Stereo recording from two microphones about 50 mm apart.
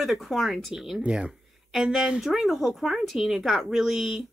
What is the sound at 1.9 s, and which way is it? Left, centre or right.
Speech, centre.